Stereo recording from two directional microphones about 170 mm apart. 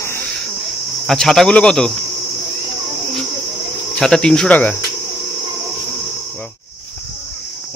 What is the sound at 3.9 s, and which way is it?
Cricket, 5° left (ahead or behind).